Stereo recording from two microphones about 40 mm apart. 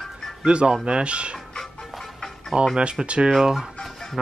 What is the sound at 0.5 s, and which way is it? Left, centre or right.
Speech, right.